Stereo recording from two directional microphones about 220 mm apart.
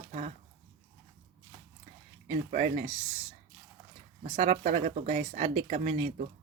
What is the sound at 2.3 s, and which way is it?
Speech, 35° right (ahead or behind).